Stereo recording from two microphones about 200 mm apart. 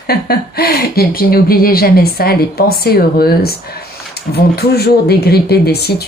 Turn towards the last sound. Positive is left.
turn(degrees=55)  # may be behind; listen again after turning